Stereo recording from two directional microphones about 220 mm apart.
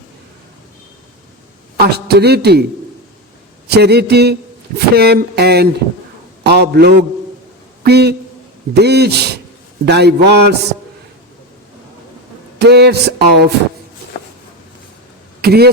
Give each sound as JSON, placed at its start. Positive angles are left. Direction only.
{"t": 1.8, "sound": "a man's voice", "side_deg": -45}
{"t": 3.7, "sound": "a man's voice", "side_deg": -50}
{"t": 12.5, "sound": "a sound", "side_deg": -50}
{"t": 15.4, "sound": "speech", "side_deg": -45}